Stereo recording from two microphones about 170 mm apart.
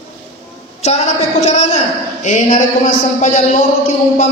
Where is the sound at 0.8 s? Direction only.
40° left (ahead or behind).